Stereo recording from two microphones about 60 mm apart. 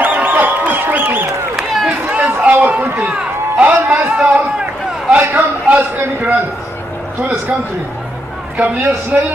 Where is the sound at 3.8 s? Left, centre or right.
Right.